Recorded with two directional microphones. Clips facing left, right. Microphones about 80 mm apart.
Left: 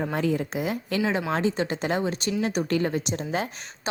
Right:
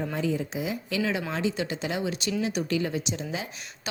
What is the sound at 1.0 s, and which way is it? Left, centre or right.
A woman's voice, left.